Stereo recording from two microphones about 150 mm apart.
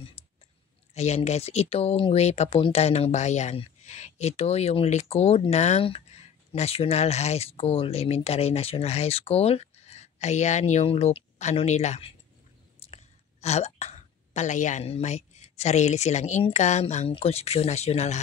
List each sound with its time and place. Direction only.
0.9 s speech: 45° left (ahead or behind)